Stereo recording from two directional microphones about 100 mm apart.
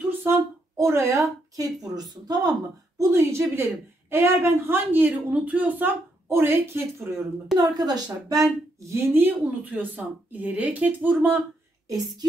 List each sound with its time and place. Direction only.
0.2 s a woman's voice: 25° right (ahead or behind); by 2.5 s 40° right (ahead or behind)
3.0 s a woman's voice: 30° right (ahead or behind)
7.5 s a woman's voice: 40° right (ahead or behind)
8.7 s a woman's voice: 30° right (ahead or behind)